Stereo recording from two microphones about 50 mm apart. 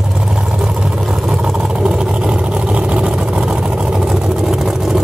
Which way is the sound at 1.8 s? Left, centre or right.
Right.